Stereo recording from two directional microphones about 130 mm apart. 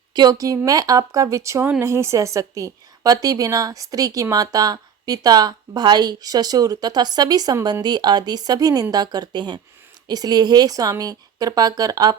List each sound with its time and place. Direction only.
0.1 s a woman's voice: 30° right (ahead or behind)